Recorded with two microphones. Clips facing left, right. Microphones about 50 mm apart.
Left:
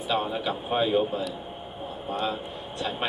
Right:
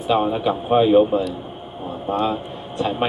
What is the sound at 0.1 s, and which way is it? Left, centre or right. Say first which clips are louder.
Speech: right 9 dB; right.